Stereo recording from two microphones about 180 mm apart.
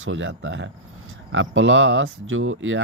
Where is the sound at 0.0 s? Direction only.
90° right.